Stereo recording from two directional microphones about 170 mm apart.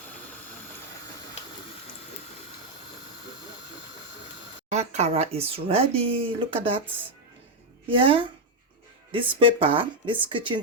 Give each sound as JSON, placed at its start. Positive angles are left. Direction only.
{"t": 4.7, "sound": "speech", "side_deg": -40}